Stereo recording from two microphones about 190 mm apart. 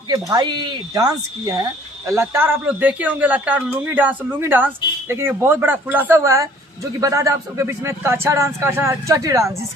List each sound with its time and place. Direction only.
0.1 s a man's voice: 20° right (ahead or behind)